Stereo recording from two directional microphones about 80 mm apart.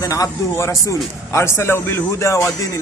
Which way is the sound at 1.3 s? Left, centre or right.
Left.